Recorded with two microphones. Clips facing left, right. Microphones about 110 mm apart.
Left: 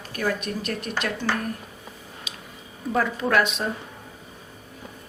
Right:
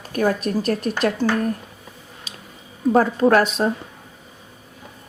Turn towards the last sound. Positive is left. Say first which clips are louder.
# right 7 dB
turn(degrees=-40)  # may be behind; listen again after turning